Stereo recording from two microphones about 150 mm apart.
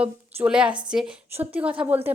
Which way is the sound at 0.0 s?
5° right (ahead or behind).